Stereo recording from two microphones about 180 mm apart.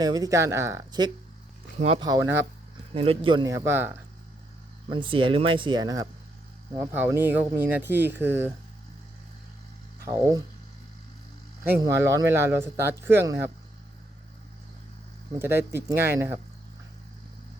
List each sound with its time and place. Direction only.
0.0 s speech: 20° right (ahead or behind)
1.8 s speech: 30° right (ahead or behind)
2.0 s speech: 15° right (ahead or behind)
2.9 s speech: 30° right (ahead or behind); by 3.9 s 15° right (ahead or behind)
4.9 s speech: 30° right (ahead or behind); by 8.4 s 10° right (ahead or behind)
10.1 s speech: 20° right (ahead or behind)
11.9 s speech: 15° right (ahead or behind)
15.4 s speech: 15° right (ahead or behind)